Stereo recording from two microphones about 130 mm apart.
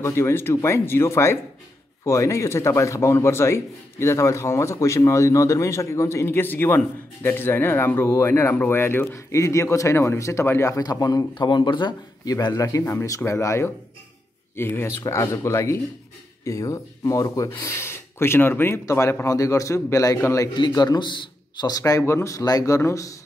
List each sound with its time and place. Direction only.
0.0 s speech: 20° left (ahead or behind)
20.5 s speech: 35° left (ahead or behind)